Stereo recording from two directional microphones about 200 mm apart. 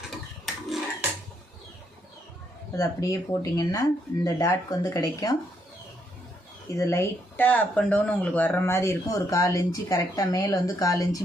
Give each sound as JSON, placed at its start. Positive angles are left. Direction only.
{"t": 0.1, "sound": "a sound", "side_deg": 0}
{"t": 2.7, "sound": "speech", "side_deg": 15}
{"t": 6.7, "sound": "speech", "side_deg": 15}